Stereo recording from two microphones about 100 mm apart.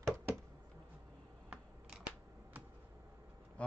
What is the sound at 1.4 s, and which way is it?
Camera, 10° right (ahead or behind).